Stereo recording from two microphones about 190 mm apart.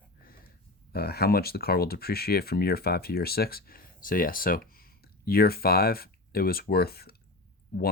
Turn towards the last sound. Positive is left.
turn(degrees=55)  # may be behind; listen again after turning